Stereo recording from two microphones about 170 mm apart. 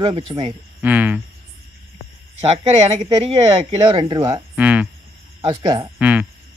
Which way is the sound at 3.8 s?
30° right (ahead or behind).